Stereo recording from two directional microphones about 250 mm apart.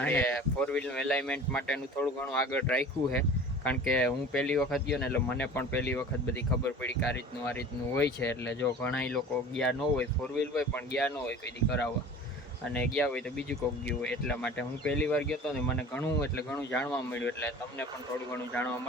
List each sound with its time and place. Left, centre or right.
0.0 s speech: centre
7.4 s speech: centre